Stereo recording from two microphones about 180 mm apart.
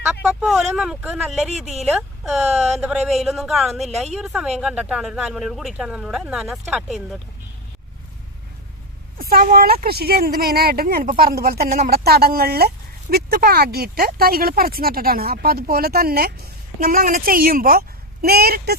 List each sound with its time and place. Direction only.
0.3 s speech: 5° right (ahead or behind)
1.6 s speech: 40° right (ahead or behind)
1.9 s speech: centre (ahead or behind)
9.1 s speech: 55° right (ahead or behind)